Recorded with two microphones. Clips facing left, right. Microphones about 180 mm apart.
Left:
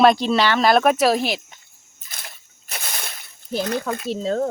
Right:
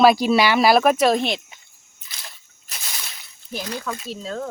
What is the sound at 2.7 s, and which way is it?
Slosh, 55° left (ahead or behind).